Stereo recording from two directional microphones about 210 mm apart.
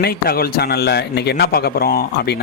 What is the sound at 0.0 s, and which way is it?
A man's voice, 45° left (ahead or behind).